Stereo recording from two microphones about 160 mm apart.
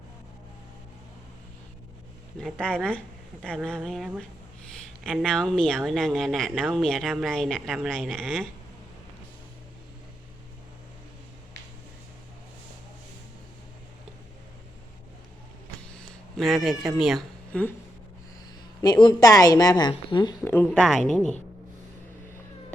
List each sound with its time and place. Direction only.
2.4 s speech: 5° left (ahead or behind)
16.0 s speech: 5° left (ahead or behind)
18.8 s a woman's voice: 25° left (ahead or behind)
20.4 s speech: 10° left (ahead or behind)